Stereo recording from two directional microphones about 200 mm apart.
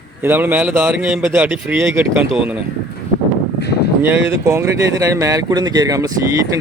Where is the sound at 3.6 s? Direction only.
55° left (ahead or behind).